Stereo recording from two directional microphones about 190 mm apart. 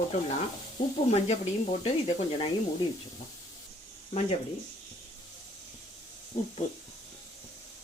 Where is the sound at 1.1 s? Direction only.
35° left (ahead or behind).